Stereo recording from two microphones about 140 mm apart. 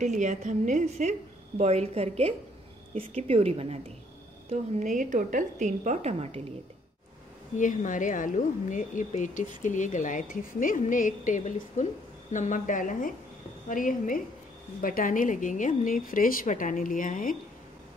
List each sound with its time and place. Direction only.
0.0 s a woman's voice: 60° right (ahead or behind)
4.5 s a woman's voice: 60° right (ahead or behind)
7.5 s speech: 65° left (ahead or behind)
14.8 s speech: 85° left